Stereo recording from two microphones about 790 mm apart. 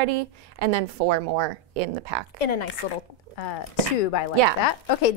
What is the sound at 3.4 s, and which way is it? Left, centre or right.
Speech, left.